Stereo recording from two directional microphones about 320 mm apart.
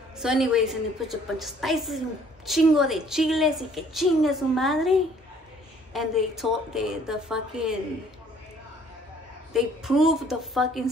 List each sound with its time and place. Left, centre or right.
0.2 s a woman's voice: centre
9.5 s a woman's voice: centre